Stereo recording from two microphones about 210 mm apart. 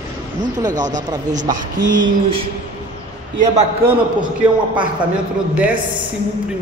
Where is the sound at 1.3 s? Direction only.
35° right (ahead or behind).